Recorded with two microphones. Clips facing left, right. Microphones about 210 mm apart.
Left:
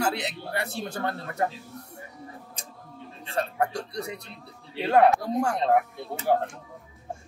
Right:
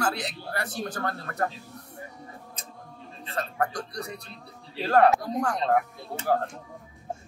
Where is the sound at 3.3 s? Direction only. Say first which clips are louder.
Left 2 dB; 25° left (ahead or behind).